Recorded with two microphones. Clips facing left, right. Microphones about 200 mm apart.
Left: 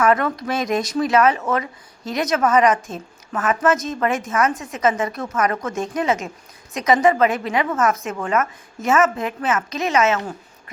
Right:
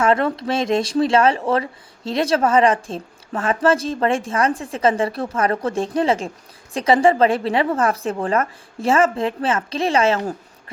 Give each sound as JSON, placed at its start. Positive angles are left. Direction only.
{"t": 0.0, "sound": "speech", "side_deg": -30}